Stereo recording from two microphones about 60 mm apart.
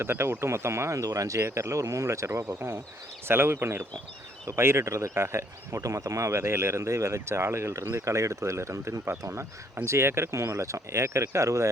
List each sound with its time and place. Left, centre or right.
0.0 s speech: right
3.2 s speech: right